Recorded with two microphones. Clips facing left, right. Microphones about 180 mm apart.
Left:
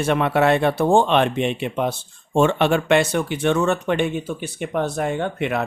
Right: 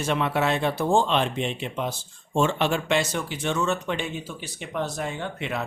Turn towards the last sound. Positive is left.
turn(degrees=60)  # may be behind; listen again after turning